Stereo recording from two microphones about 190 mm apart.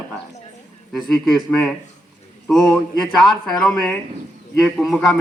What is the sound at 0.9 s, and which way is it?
Speech, centre (ahead or behind).